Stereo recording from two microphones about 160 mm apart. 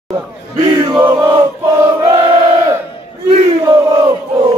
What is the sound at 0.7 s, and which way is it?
Chant, 25° right (ahead or behind).